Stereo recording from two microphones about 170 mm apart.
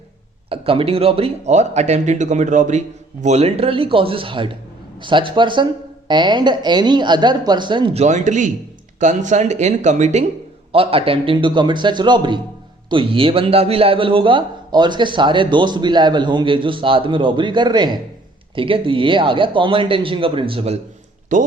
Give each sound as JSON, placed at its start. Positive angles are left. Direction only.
{"t": 0.5, "sound": "a man's voice", "side_deg": -35}
{"t": 8.0, "sound": "a man's voice", "side_deg": -45}
{"t": 21.3, "sound": "speech", "side_deg": -45}